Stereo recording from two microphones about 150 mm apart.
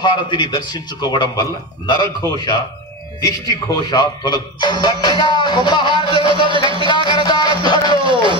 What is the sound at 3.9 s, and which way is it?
Speech, 25° left (ahead or behind).